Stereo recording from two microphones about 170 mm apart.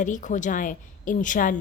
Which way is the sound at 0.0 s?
50° left (ahead or behind).